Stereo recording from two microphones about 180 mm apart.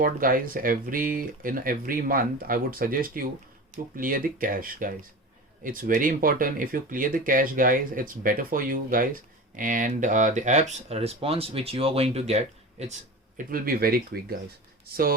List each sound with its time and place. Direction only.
0.0 s speech: 50° right (ahead or behind)